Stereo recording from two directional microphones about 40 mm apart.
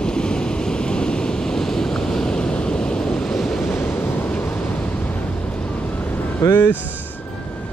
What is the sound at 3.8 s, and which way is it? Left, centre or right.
Waves, left.